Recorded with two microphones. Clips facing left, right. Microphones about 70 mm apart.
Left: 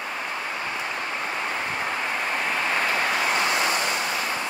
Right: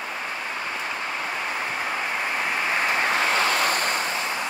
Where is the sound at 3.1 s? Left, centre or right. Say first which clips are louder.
Right 1 dB; right.